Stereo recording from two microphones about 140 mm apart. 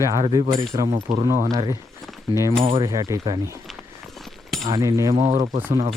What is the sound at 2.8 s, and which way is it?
Speech, 25° right (ahead or behind).